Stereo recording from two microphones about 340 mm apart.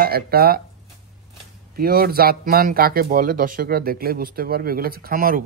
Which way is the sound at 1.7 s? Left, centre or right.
Right.